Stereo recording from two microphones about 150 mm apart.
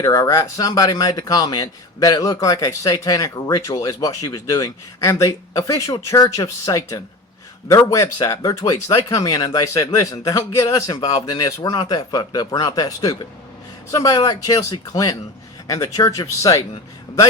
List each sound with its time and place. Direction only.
0.0 s speech: 25° left (ahead or behind)